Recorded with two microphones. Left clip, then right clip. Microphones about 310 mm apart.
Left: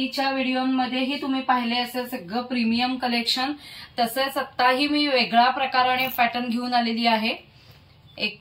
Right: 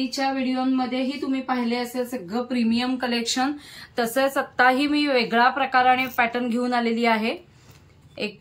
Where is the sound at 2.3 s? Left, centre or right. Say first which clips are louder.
Left 2 dB; centre.